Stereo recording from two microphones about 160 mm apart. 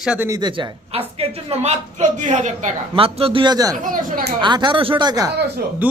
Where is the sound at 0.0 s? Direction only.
5° right (ahead or behind).